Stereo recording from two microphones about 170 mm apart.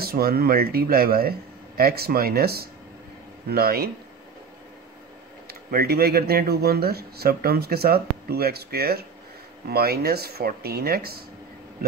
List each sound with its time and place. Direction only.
0.0 s speech: 65° right (ahead or behind)
5.5 s speech: 60° right (ahead or behind)